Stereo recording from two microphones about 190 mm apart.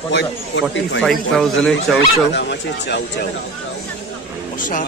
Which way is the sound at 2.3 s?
65° left (ahead or behind).